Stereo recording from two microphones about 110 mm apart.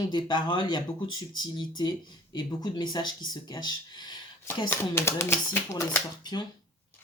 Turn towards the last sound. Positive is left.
turn(degrees=40)  # may be behind; listen again after turning